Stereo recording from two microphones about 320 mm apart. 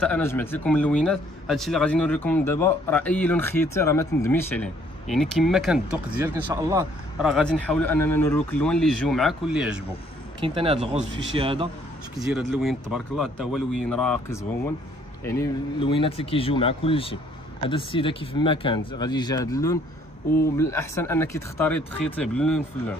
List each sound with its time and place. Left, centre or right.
0.0 s speech: centre
10.4 s speech: centre
12.2 s speech: centre